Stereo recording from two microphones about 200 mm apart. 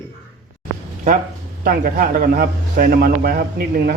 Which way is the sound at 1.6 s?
45° right (ahead or behind).